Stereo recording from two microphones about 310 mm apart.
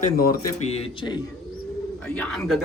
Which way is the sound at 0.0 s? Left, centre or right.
Left.